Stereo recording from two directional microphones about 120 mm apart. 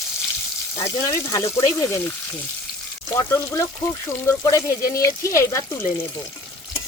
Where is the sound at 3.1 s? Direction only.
25° left (ahead or behind).